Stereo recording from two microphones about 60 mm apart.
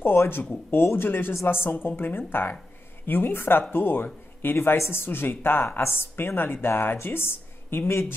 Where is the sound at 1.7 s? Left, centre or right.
Left.